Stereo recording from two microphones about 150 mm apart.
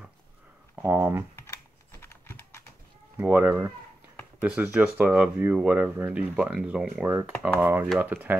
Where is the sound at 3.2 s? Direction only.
15° right (ahead or behind).